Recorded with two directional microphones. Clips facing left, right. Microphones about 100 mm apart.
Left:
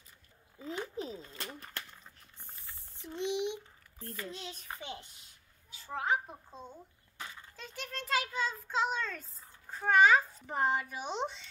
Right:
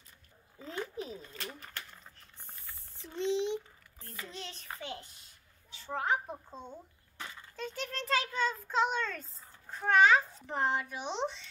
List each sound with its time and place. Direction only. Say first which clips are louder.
0.6 s speech: even; 15° left (ahead or behind)
0.9 s speech: left 1 dB; 30° left (ahead or behind)
2.7 s a sound: left 1 dB; 20° left (ahead or behind)
4.4 s a child's voice: right 1 dB; 10° left (ahead or behind)
5.7 s a child's voice: right 1 dB; centre (ahead or behind)